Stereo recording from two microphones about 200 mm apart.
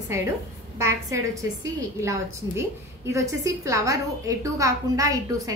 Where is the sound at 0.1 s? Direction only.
15° right (ahead or behind).